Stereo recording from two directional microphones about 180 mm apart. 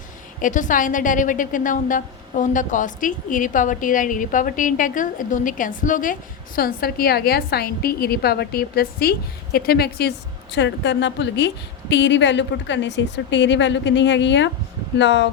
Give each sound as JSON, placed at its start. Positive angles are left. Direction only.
{"t": 0.4, "sound": "a woman's voice", "side_deg": 45}